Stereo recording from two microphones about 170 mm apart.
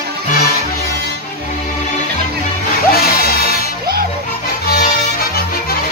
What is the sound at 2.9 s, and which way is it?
Music, 65° left (ahead or behind).